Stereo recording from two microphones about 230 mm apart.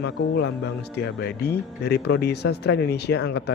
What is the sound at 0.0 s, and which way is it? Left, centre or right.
Speech, left.